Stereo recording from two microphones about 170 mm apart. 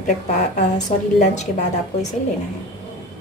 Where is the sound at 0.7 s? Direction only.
45° left (ahead or behind).